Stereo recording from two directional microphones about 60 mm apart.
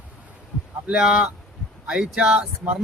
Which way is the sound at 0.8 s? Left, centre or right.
Centre.